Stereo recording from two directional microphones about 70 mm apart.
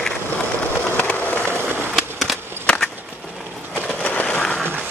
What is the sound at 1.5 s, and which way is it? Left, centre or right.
Skateboard, right.